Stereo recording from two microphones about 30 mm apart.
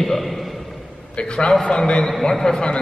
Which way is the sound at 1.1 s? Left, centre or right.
Left.